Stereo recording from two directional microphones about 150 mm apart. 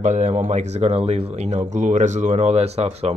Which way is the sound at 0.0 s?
55° right (ahead or behind).